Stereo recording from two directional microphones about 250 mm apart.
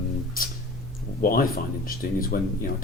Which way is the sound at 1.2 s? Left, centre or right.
Left.